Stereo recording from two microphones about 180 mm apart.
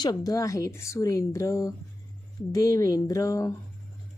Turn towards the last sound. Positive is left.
turn(degrees=20)  # may be behind; listen again after turning